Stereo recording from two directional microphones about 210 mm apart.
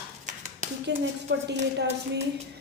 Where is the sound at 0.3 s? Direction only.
35° right (ahead or behind).